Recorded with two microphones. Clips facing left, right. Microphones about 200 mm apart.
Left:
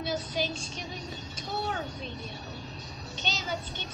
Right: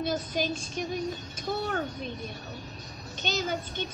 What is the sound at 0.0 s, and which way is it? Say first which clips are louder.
Speech: right 2 dB; 50° right (ahead or behind).